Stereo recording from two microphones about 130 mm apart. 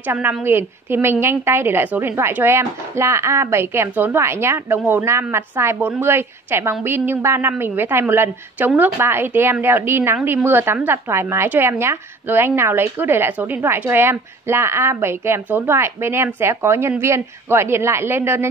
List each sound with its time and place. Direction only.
0.1 s a woman's voice: 15° right (ahead or behind)